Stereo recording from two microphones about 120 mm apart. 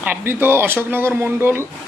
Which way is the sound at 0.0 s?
15° right (ahead or behind).